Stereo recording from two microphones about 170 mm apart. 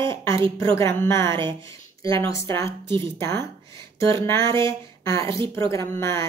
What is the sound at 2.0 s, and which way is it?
Speech, 20° left (ahead or behind).